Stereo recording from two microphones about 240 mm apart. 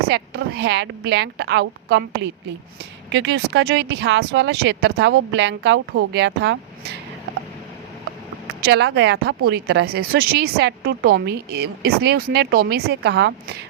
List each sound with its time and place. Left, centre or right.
0.1 s a woman's voice: right
8.4 s speech: right